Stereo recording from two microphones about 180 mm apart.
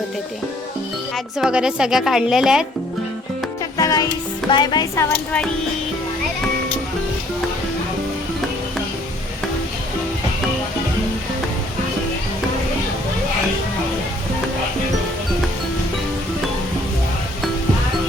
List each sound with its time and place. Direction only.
1.1 s speech: 5° right (ahead or behind)
3.8 s music: 20° left (ahead or behind)